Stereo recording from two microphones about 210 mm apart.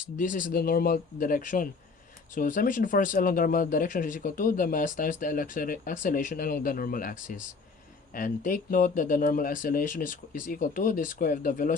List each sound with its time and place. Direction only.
0.2 s speech: 40° left (ahead or behind)